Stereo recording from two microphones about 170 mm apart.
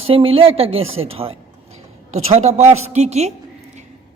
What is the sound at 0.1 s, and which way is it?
A man's voice, 35° right (ahead or behind).